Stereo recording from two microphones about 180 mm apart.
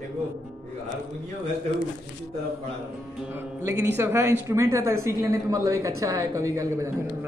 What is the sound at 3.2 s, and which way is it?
Speech, 15° right (ahead or behind).